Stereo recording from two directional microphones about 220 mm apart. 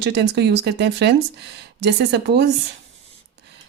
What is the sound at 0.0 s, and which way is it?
Speech, 50° right (ahead or behind).